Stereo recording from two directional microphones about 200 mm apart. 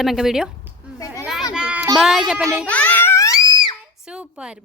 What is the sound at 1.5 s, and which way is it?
Child singing, 5° right (ahead or behind).